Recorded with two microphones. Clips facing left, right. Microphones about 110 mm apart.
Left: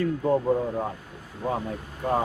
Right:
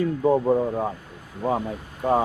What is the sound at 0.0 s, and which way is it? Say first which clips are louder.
Speech: right 3 dB; 15° right (ahead or behind).